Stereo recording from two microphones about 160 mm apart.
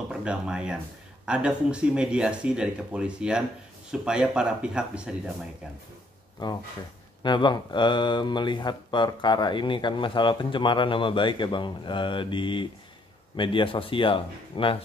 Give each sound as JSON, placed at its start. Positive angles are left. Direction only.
{"t": 0.1, "sound": "speech", "side_deg": -5}
{"t": 7.2, "sound": "speech", "side_deg": 30}